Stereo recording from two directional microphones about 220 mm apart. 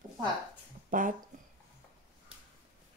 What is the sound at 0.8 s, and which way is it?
Speech, 35° right (ahead or behind).